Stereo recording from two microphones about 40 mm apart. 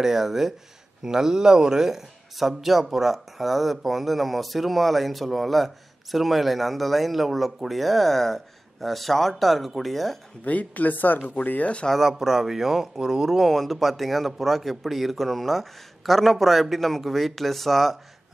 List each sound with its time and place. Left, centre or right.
0.0 s speech: centre
10.4 s a woman's voice: left
12.0 s speech: centre
13.4 s speech: centre